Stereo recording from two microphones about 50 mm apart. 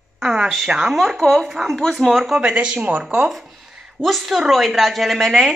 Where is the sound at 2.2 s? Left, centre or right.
Centre.